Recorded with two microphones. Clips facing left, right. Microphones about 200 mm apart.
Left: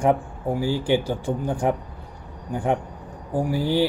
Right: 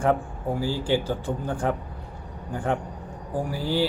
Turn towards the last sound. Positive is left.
turn(degrees=15)  # may be behind; listen again after turning